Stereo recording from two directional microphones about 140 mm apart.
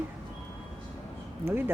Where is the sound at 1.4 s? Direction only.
15° right (ahead or behind).